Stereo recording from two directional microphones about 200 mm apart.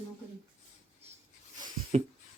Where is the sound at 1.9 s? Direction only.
30° right (ahead or behind).